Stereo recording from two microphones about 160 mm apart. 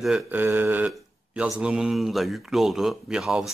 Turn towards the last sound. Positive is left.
turn(degrees=-5)  # may be behind; listen again after turning